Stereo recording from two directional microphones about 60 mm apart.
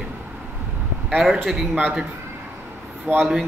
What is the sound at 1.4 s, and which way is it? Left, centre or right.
Speech, centre.